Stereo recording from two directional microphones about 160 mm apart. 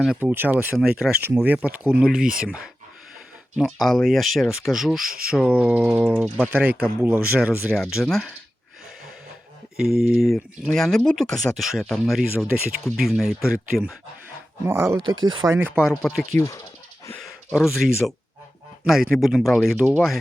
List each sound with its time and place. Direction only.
0.0 s speech: 5° right (ahead or behind)
6.2 s speech: 5° left (ahead or behind)
6.5 s speech: 10° right (ahead or behind)
7.7 s speech: centre (ahead or behind)
10.0 s speech: centre (ahead or behind)
14.7 s speech: 15° right (ahead or behind)
15.0 s speech: 30° right (ahead or behind)
15.5 s speech: 10° right (ahead or behind)
16.4 s speech: 20° left (ahead or behind)
17.5 s speech: centre (ahead or behind)
18.9 s speech: centre (ahead or behind)